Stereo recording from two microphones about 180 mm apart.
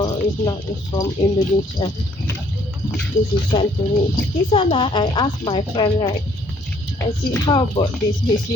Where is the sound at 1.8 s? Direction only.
25° left (ahead or behind).